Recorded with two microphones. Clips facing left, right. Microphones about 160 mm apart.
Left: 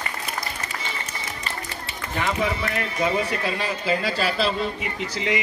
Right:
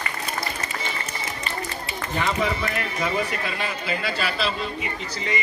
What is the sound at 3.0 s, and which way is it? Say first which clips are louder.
Speech: left 3 dB; 30° left (ahead or behind).